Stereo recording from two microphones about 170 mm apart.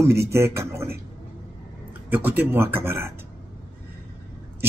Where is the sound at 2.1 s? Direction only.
10° right (ahead or behind).